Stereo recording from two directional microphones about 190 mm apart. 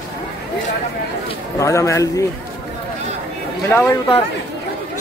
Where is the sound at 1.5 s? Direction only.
15° left (ahead or behind).